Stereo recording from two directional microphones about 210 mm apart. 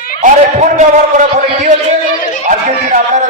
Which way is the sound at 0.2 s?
35° right (ahead or behind).